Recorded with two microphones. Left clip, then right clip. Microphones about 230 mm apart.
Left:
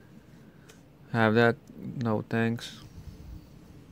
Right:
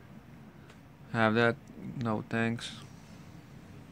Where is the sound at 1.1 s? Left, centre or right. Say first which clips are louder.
Left 3 dB; left.